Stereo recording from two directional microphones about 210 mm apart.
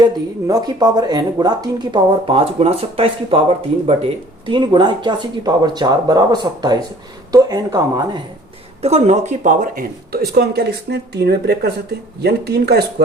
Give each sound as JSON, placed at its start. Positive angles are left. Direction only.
{"t": 0.0, "sound": "speech", "side_deg": -20}
{"t": 8.8, "sound": "speech", "side_deg": -30}